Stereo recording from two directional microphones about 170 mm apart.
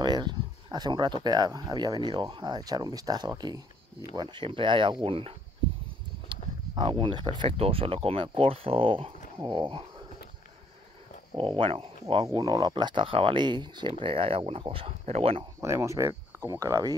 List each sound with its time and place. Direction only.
0.0 s speech: 25° right (ahead or behind)
11.3 s speech: 30° right (ahead or behind)
15.6 s speech: 15° right (ahead or behind)